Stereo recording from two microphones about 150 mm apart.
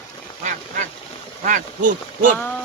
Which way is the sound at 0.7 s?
60° right (ahead or behind).